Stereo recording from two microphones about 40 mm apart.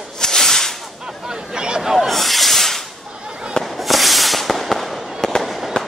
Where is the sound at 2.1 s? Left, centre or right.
Centre.